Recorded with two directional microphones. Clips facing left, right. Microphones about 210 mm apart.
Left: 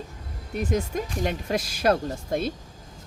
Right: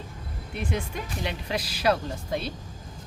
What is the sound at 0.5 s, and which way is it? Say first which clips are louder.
Speech: left 5 dB; 40° left (ahead or behind).